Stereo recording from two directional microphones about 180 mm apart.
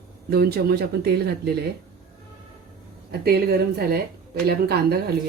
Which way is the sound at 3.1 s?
60° right (ahead or behind).